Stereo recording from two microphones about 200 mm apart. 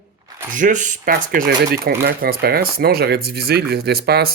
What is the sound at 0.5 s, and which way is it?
Speech, 40° right (ahead or behind).